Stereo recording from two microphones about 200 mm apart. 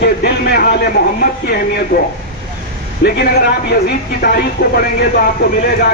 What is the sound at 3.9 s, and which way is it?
Speech, 50° left (ahead or behind).